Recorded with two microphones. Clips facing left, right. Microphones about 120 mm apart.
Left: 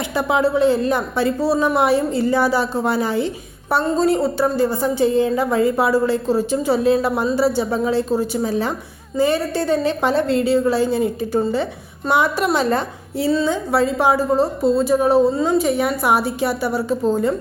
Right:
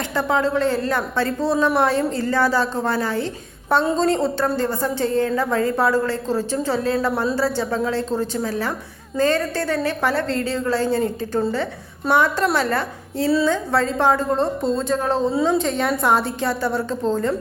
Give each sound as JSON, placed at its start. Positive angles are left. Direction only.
{"t": 0.1, "sound": "speech", "side_deg": 15}